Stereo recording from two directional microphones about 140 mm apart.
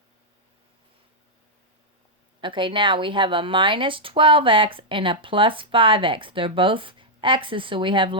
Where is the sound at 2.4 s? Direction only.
35° right (ahead or behind).